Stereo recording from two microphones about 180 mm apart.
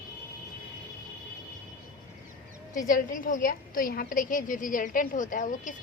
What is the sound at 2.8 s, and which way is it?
A woman's voice, 50° left (ahead or behind).